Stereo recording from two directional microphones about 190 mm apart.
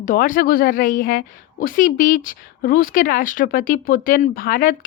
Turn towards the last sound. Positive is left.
turn(degrees=50)  # may be behind; listen again after turning